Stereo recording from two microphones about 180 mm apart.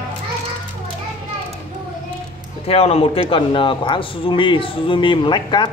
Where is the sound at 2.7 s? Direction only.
35° left (ahead or behind).